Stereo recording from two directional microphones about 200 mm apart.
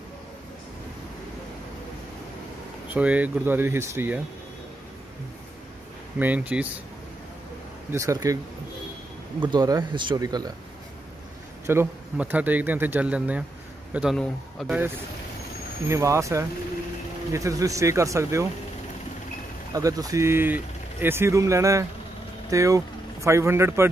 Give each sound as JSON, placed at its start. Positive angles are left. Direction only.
{"t": 2.9, "sound": "speech", "side_deg": -5}
{"t": 6.1, "sound": "speech", "side_deg": -10}
{"t": 7.9, "sound": "speech", "side_deg": -15}
{"t": 9.5, "sound": "speech", "side_deg": -20}
{"t": 11.6, "sound": "a man's voice", "side_deg": -10}
{"t": 15.9, "sound": "speech", "side_deg": -15}
{"t": 19.7, "sound": "speech", "side_deg": -15}